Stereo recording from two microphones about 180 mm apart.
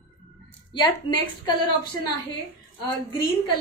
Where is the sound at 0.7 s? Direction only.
25° left (ahead or behind).